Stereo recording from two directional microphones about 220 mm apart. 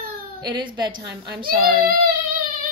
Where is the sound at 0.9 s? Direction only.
50° right (ahead or behind).